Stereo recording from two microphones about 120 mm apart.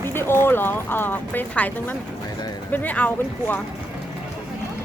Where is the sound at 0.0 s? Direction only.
20° left (ahead or behind).